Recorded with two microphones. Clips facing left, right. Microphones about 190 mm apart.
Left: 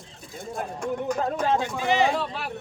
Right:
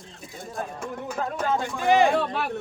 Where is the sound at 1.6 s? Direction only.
50° right (ahead or behind).